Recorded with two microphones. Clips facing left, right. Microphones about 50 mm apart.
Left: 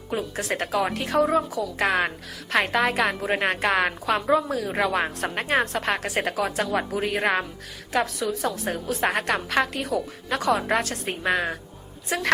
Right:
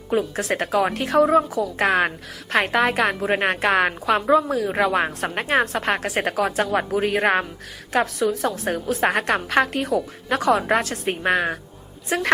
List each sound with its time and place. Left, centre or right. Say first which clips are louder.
0.2 s a woman's voice: right 4 dB; right
1.9 s a woman's voice: right 4 dB; right
5.7 s a woman's voice: right 3 dB; right